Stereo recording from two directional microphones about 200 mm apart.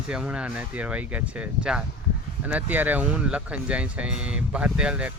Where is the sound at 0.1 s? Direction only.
5° right (ahead or behind).